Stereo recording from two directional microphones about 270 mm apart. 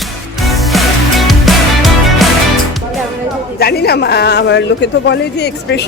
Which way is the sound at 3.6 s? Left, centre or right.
Left.